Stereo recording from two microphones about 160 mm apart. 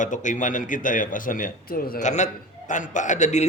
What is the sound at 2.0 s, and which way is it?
A man's voice, 50° left (ahead or behind).